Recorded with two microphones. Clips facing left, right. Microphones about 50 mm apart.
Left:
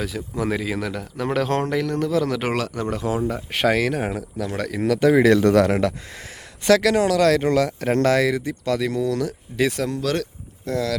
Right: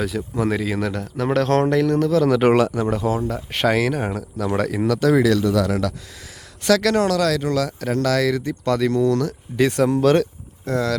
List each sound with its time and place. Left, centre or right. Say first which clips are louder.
0.0 s a man's voice: right 3 dB; centre
2.9 s speech: right 2 dB; centre
4.4 s a man's voice: right 7 dB; centre
4.9 s a man's voice: left 1 dB; centre
5.4 s speech: left 3 dB; left
6.8 s speech: even; centre
7.2 s a man's voice: left 3 dB; left; by 8.5 s centre
8.6 s speech: right 5 dB; centre
10.0 s speech: right 8 dB; right
10.7 s speech: right 2 dB; centre